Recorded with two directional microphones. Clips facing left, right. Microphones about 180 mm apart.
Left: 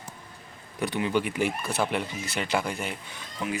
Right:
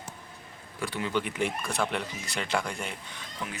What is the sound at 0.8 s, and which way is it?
Speech, 15° left (ahead or behind).